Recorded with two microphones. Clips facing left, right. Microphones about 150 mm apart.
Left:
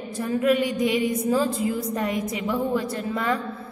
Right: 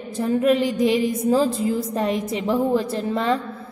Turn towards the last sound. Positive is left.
turn(degrees=-25)  # may be behind; listen again after turning